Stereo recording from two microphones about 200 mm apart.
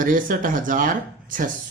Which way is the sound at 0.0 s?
45° right (ahead or behind).